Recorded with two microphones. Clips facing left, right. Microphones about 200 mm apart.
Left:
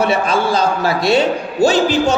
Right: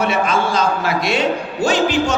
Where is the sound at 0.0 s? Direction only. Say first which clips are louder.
Left 2 dB; 35° left (ahead or behind).